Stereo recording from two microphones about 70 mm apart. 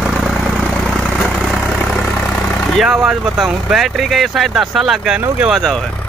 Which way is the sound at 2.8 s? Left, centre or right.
Centre.